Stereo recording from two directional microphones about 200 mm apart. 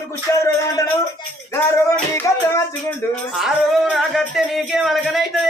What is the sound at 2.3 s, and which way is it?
Speech, 15° left (ahead or behind).